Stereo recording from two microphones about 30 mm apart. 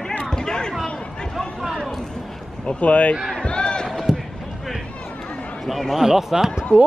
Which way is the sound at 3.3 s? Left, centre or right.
Left.